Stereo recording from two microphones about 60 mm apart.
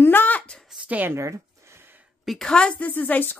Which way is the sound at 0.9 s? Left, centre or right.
Right.